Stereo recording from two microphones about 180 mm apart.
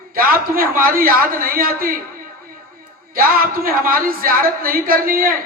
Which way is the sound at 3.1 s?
55° right (ahead or behind).